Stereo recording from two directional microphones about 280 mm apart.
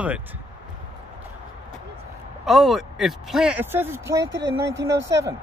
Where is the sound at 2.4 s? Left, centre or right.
Centre.